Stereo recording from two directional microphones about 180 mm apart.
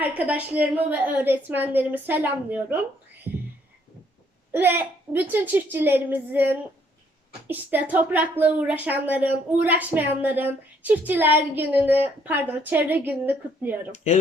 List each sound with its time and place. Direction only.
0.0 s a woman's voice: 10° right (ahead or behind)
3.3 s a sound: 10° right (ahead or behind)
4.5 s a woman's voice: 10° right (ahead or behind)
13.9 s speech: 40° left (ahead or behind)